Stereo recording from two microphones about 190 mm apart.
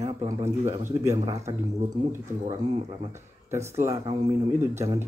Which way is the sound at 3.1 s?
15° right (ahead or behind).